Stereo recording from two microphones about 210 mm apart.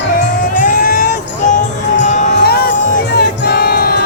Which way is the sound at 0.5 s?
40° left (ahead or behind).